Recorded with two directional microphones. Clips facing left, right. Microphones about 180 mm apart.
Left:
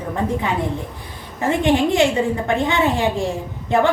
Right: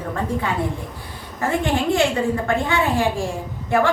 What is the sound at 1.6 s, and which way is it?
A woman's voice, 20° left (ahead or behind).